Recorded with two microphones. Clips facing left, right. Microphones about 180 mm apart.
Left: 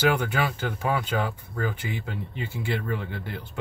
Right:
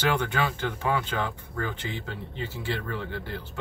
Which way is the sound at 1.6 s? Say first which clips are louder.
Left 4 dB; 10° left (ahead or behind).